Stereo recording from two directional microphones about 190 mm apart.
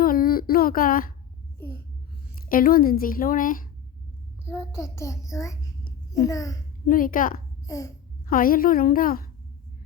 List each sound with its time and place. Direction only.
0.0 s a sound: 50° left (ahead or behind)
2.5 s a woman's voice: 50° left (ahead or behind)
4.4 s a child's voice: 15° left (ahead or behind)
6.8 s a woman's voice: 45° left (ahead or behind)
7.7 s a child's voice: 15° left (ahead or behind)
8.3 s a woman's voice: 50° left (ahead or behind)